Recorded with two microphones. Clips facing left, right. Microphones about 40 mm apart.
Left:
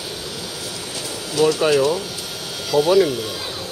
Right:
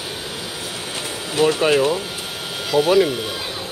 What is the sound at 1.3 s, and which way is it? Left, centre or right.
Speech, right.